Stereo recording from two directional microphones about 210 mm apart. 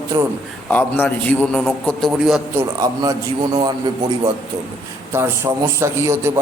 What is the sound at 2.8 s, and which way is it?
Speech, 15° right (ahead or behind).